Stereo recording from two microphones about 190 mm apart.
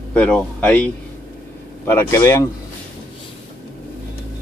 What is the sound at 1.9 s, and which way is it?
Speech, 15° left (ahead or behind).